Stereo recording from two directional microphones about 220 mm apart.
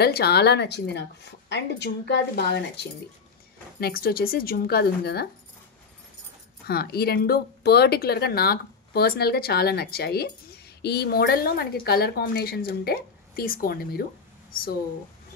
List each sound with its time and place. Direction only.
0.0 s speech: 45° left (ahead or behind)
6.7 s speech: 45° left (ahead or behind)